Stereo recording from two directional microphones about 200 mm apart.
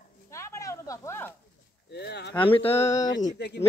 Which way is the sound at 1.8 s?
55° left (ahead or behind).